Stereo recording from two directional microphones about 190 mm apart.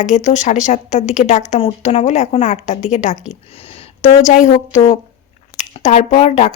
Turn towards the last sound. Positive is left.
turn(degrees=35)  # may be behind; listen again after turning